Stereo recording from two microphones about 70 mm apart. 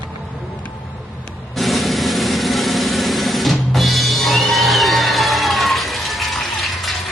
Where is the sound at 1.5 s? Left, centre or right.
Centre.